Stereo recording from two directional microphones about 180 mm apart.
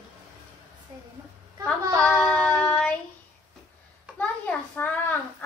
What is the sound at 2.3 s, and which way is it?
Child singing, 5° left (ahead or behind).